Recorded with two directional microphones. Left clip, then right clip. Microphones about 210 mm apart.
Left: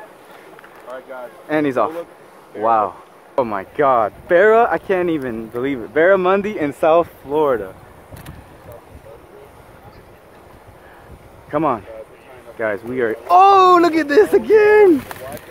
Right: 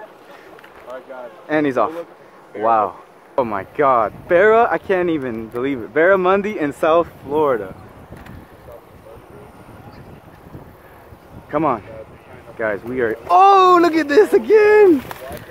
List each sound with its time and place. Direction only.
0.8 s speech: 35° left (ahead or behind)
1.5 s speech: centre (ahead or behind)
11.5 s speech: 5° left (ahead or behind)